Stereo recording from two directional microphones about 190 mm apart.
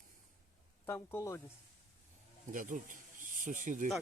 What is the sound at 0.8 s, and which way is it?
Speech, 15° left (ahead or behind).